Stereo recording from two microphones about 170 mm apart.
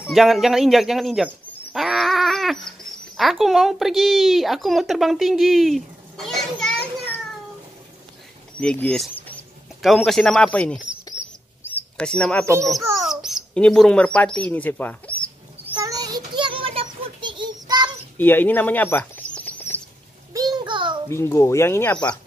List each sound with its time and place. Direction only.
0.0 s a sound: centre (ahead or behind)
3.2 s a child's voice: centre (ahead or behind)
8.5 s speech: 5° left (ahead or behind)
12.0 s speech: 5° left (ahead or behind)
13.0 s bird: centre (ahead or behind)
15.8 s child singing: 20° right (ahead or behind)
17.0 s a sound: 30° right (ahead or behind)
18.1 s bird: 10° left (ahead or behind)
20.3 s a sound: 25° right (ahead or behind)
21.1 s speech: 15° left (ahead or behind)